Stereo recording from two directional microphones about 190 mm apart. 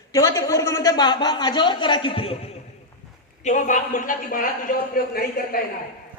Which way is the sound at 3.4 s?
40° left (ahead or behind).